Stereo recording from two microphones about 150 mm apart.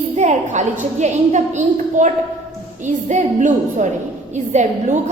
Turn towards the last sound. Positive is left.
turn(degrees=-50)  # may be behind; listen again after turning